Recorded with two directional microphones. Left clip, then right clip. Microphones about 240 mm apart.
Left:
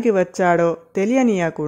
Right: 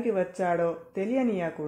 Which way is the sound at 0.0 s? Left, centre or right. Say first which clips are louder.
Left 10 dB; left.